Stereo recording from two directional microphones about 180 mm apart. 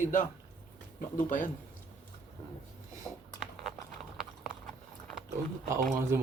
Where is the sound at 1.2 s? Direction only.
45° left (ahead or behind).